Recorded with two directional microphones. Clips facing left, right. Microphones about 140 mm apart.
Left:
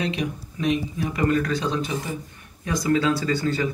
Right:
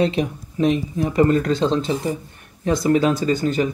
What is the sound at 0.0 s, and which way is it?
Speech, 35° right (ahead or behind).